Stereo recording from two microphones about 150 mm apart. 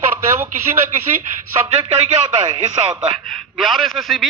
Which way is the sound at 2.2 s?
30° right (ahead or behind).